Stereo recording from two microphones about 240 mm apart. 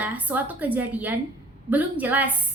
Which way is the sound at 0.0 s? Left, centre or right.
Centre.